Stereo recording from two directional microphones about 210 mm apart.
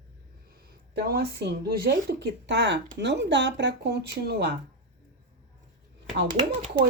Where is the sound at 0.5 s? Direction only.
45° right (ahead or behind).